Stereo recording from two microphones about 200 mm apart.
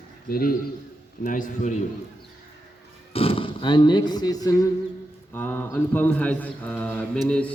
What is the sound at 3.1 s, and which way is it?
A man's voice, 25° left (ahead or behind).